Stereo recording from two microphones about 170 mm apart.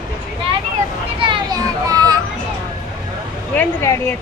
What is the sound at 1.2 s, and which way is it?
Children playing, 25° right (ahead or behind).